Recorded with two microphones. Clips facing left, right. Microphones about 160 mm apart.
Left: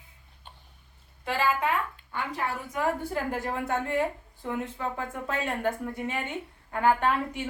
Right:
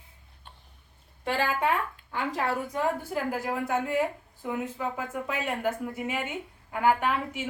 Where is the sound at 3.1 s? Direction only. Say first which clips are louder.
Right 1 dB; 5° right (ahead or behind).